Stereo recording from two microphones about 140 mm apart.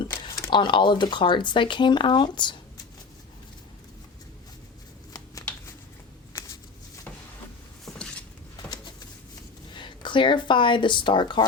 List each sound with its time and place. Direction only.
0.3 s speech: 30° left (ahead or behind)
7.9 s a sound: 5° left (ahead or behind)
9.7 s speech: 35° left (ahead or behind)